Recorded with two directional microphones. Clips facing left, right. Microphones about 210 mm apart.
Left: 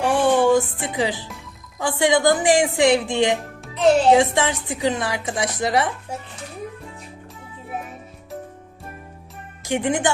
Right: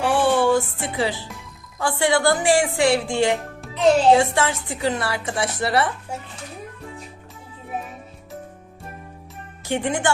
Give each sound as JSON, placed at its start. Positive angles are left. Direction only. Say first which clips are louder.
{"t": 0.0, "sound": "music", "louder": "left 1 dB", "side_deg": 15}
{"t": 1.8, "sound": "a woman's voice", "louder": "left 2 dB", "side_deg": 15}
{"t": 9.6, "sound": "a woman's voice", "louder": "left 2 dB", "side_deg": 15}